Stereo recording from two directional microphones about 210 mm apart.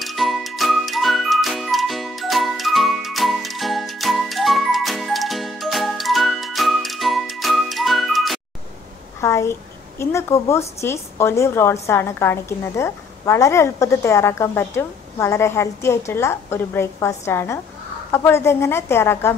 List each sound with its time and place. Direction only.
0.0 s music: centre (ahead or behind)
9.2 s a sound: 15° left (ahead or behind)
9.9 s a woman's voice: 15° left (ahead or behind)